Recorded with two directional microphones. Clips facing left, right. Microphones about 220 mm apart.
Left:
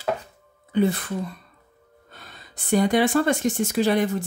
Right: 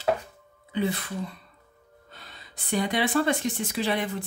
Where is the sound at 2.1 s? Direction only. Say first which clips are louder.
Left 3 dB; 50° left (ahead or behind).